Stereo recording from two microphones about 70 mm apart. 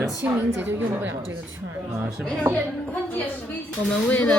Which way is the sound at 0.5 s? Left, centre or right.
Right.